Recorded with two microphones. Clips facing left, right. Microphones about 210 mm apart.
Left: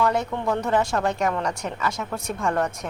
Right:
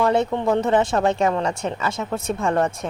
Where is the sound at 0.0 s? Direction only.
25° right (ahead or behind).